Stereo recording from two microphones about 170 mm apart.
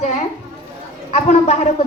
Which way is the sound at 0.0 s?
45° left (ahead or behind).